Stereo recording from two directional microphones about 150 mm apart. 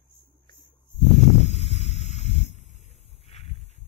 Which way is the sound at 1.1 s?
45° left (ahead or behind).